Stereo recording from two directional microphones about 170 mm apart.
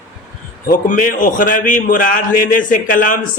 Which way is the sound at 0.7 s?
50° left (ahead or behind).